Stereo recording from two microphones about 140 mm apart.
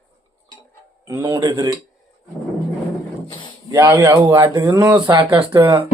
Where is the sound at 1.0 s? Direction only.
25° right (ahead or behind).